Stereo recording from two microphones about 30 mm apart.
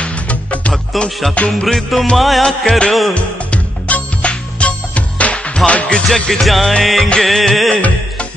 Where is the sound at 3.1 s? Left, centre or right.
Left.